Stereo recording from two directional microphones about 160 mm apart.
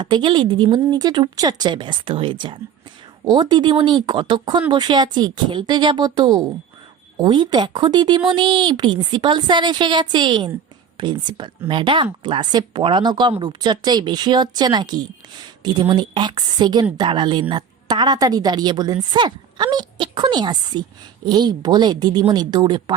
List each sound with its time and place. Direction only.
0.0 s a woman's voice: 30° right (ahead or behind)